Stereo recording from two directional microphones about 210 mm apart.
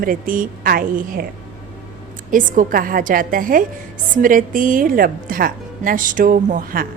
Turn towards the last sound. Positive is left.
turn(degrees=-40)  # may be behind; listen again after turning